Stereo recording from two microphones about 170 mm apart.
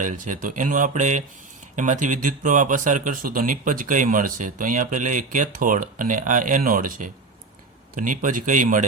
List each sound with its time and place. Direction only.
0.0 s speech: 50° right (ahead or behind)